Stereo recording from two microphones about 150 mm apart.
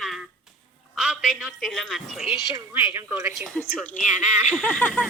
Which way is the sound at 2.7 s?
15° right (ahead or behind).